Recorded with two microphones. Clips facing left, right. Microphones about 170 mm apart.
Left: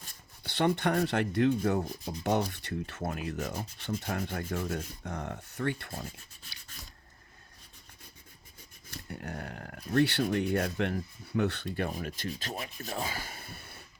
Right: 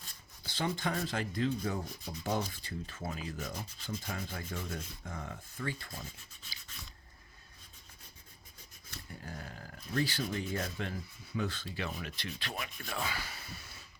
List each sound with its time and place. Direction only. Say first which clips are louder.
0.4 s rub: left 7 dB; 65° left (ahead or behind)
2.5 s speech: left 6 dB; 65° left (ahead or behind)
3.8 s rub: left 8 dB; 65° left (ahead or behind)
9.1 s speech: left 6 dB; 65° left (ahead or behind)
11.9 s rub: left 5 dB; 45° left (ahead or behind)